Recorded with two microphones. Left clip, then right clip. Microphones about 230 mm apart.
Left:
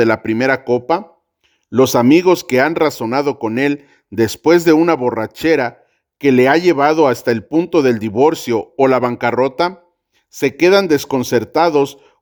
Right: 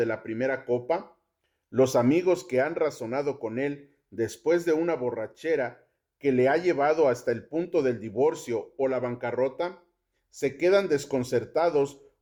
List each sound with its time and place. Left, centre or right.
0.0 s speech: left